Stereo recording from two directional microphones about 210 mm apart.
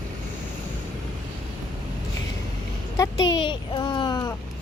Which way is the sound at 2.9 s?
15° left (ahead or behind).